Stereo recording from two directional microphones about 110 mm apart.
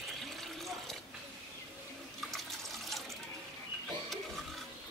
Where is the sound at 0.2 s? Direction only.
Centre (ahead or behind).